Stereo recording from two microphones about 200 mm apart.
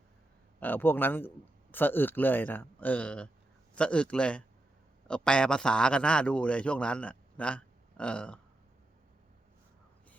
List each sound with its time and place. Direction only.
0.6 s a man's voice: 10° left (ahead or behind)